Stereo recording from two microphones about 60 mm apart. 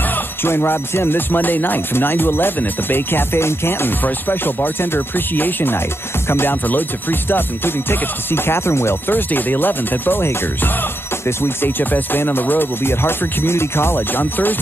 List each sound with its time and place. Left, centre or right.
0.0 s music: left